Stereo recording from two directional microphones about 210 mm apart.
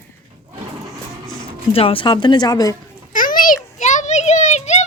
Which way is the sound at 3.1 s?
40° left (ahead or behind).